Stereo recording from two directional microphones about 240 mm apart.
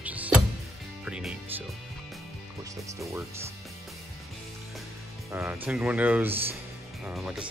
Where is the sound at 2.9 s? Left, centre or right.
Centre.